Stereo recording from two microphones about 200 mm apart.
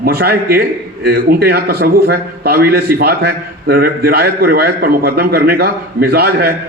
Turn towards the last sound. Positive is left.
turn(degrees=-50)  # may be behind; listen again after turning